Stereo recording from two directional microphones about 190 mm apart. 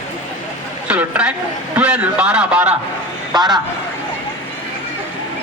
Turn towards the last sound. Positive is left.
turn(degrees=-20)  # may be behind; listen again after turning